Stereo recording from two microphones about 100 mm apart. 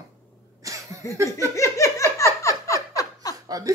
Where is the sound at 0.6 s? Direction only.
35° right (ahead or behind).